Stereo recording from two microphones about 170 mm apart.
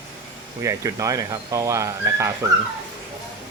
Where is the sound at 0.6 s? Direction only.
20° right (ahead or behind).